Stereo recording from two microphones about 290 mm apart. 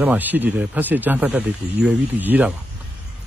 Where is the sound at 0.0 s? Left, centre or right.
Centre.